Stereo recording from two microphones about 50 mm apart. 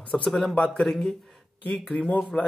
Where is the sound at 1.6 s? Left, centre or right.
Left.